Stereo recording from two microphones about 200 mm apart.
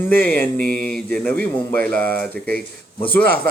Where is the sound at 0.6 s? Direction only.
45° right (ahead or behind).